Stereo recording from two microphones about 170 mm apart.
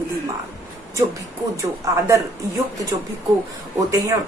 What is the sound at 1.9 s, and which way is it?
Speech, 20° right (ahead or behind).